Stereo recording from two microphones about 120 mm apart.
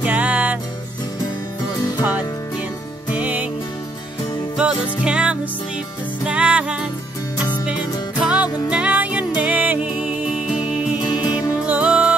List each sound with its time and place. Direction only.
0.0 s music: 10° right (ahead or behind)
2.0 s music: 15° right (ahead or behind)
4.6 s music: 10° right (ahead or behind)
8.2 s music: 10° right (ahead or behind)
11.0 s music: 40° left (ahead or behind)
11.6 s music: 10° right (ahead or behind)